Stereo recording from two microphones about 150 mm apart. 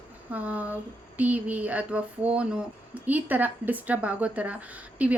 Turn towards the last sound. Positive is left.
turn(degrees=-10)  # may be behind; listen again after turning